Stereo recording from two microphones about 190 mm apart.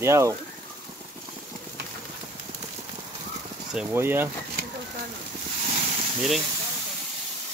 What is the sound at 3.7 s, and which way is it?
Speech, 10° right (ahead or behind).